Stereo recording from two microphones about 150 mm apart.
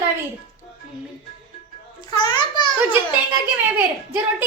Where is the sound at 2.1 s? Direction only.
25° left (ahead or behind).